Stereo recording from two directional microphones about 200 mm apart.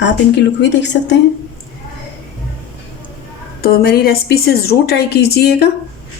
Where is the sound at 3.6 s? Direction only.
50° left (ahead or behind).